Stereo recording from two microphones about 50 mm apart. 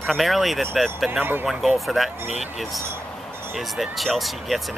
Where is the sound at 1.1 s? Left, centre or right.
Right.